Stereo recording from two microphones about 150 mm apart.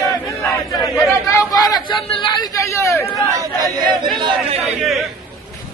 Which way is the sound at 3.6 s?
30° right (ahead or behind).